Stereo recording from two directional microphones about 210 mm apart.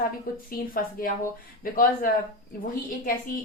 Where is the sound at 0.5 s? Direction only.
45° left (ahead or behind).